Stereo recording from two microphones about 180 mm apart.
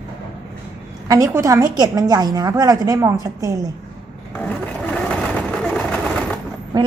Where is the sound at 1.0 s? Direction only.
20° right (ahead or behind).